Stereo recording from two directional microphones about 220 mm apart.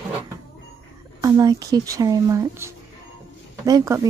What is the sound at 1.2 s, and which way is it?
Speech, 15° right (ahead or behind).